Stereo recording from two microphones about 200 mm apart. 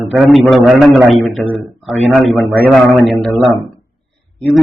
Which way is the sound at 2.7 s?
Centre (ahead or behind).